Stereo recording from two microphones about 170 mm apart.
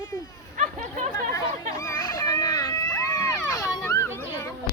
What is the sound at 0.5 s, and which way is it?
Chatter, 45° right (ahead or behind).